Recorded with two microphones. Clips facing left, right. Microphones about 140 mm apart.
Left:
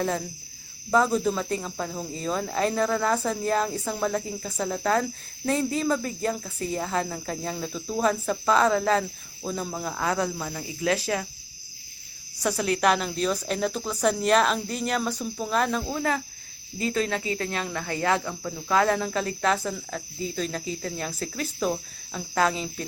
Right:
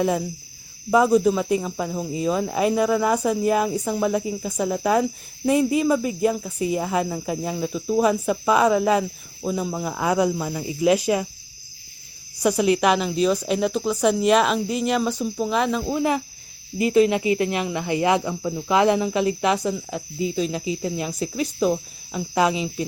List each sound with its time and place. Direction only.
0.0 s speech: 10° right (ahead or behind)
12.4 s speech: 10° right (ahead or behind)
15.8 s speech: 15° right (ahead or behind)